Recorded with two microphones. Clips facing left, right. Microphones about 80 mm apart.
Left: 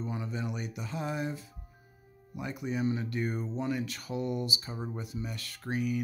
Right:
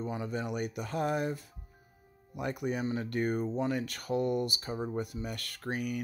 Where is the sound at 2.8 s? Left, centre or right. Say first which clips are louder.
Even; right.